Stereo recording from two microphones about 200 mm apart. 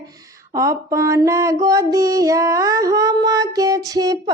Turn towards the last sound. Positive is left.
turn(degrees=-20)  # may be behind; listen again after turning